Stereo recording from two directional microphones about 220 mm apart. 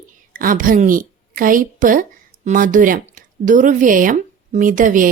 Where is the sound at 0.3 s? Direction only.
40° right (ahead or behind).